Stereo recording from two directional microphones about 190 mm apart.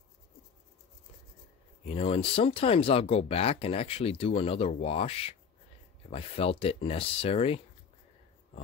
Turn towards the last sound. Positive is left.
turn(degrees=30)  # may be behind; listen again after turning